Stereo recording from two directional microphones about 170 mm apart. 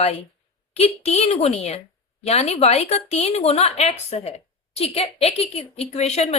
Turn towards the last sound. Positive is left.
turn(degrees=40)  # may be behind; listen again after turning